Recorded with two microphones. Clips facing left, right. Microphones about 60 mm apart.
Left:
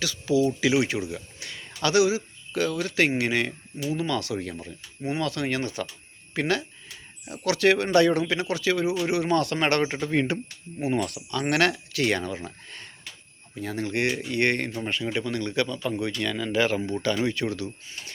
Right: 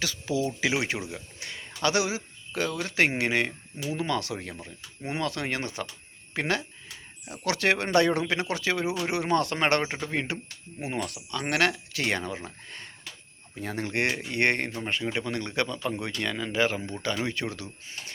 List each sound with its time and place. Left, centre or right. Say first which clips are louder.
0.0 s speech: left 5 dB; right
9.8 s speech: left 5 dB; centre
13.6 s speech: left 2 dB; right